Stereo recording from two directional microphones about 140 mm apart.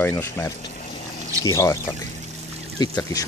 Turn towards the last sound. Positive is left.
turn(degrees=25)  # may be behind; listen again after turning